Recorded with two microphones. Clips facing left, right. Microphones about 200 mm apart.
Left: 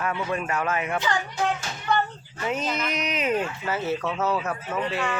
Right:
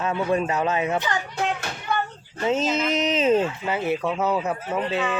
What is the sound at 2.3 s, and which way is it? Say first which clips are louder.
Speech: right 5 dB; 25° right (ahead or behind).